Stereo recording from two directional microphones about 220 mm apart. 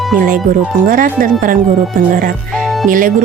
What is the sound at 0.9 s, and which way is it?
Speech, 40° right (ahead or behind).